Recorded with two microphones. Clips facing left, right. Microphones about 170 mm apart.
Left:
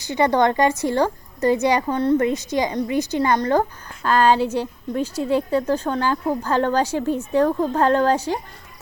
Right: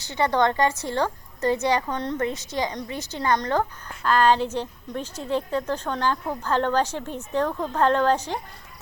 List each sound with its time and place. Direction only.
0.0 s a woman's voice: 15° left (ahead or behind)